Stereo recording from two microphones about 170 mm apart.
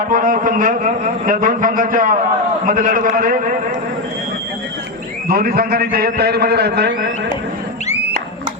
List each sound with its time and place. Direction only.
0.1 s a man's voice: 55° right (ahead or behind)
5.3 s a man's voice: 60° right (ahead or behind)